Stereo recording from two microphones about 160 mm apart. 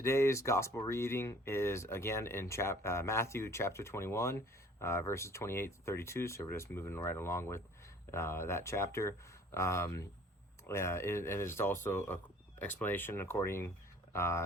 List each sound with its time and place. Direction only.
0.0 s speech: 15° left (ahead or behind)